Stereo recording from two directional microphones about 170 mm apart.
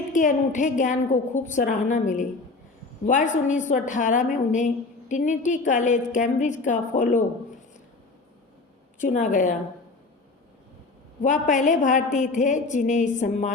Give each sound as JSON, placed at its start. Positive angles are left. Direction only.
{"t": 0.1, "sound": "a woman's voice", "side_deg": 50}
{"t": 9.0, "sound": "a woman's voice", "side_deg": 45}
{"t": 11.2, "sound": "a woman's voice", "side_deg": 45}